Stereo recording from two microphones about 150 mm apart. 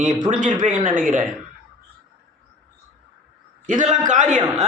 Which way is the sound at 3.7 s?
55° right (ahead or behind).